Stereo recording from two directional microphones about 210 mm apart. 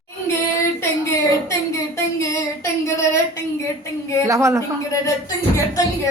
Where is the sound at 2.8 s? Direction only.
15° left (ahead or behind).